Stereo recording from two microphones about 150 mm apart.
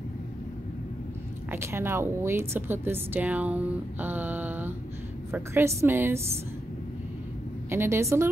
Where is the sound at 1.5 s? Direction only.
15° right (ahead or behind).